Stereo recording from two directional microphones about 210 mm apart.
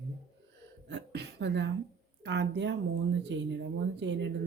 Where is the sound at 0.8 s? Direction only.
55° right (ahead or behind).